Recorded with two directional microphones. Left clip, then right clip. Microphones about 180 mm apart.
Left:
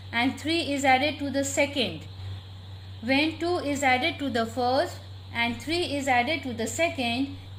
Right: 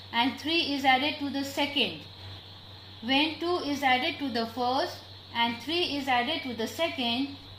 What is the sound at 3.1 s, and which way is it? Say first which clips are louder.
Speech: left 1 dB; 45° left (ahead or behind).